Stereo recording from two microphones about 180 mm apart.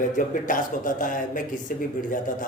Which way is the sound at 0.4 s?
45° left (ahead or behind).